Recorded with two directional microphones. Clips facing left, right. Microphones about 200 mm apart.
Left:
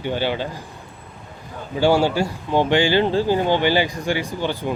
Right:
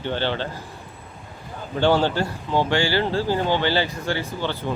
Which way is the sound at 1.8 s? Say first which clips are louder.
Left 2 dB; 10° left (ahead or behind).